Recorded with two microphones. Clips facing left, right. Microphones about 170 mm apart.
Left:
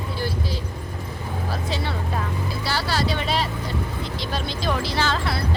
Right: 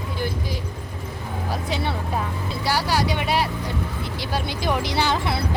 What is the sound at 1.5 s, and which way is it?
Vehicle, 15° right (ahead or behind).